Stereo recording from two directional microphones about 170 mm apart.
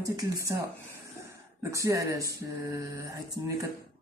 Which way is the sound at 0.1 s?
20° right (ahead or behind).